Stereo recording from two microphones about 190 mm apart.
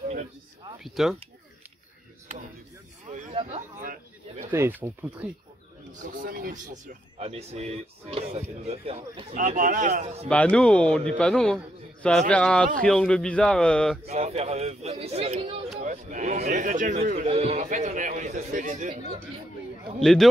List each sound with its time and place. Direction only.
0.8 s a man's voice: centre (ahead or behind)
3.1 s a sound: 35° right (ahead or behind)
4.5 s speech: 10° right (ahead or behind)
6.1 s speech: 45° right (ahead or behind)
9.3 s a man's voice: 45° right (ahead or behind)
10.2 s a man's voice: 5° left (ahead or behind)
14.0 s speech: 35° right (ahead or behind)
17.3 s speech: 35° right (ahead or behind)
20.0 s a man's voice: 5° left (ahead or behind)